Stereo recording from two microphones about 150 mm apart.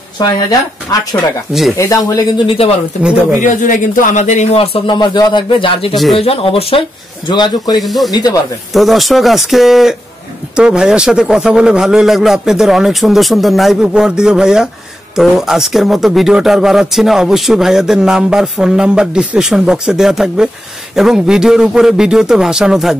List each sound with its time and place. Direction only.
1.8 s speech: 25° left (ahead or behind)
3.0 s speech: 5° right (ahead or behind)
3.3 s speech: 60° left (ahead or behind); by 7.8 s 30° left (ahead or behind)
7.8 s a man's voice: centre (ahead or behind)
8.1 s speech: 25° left (ahead or behind)
8.7 s a man's voice: centre (ahead or behind)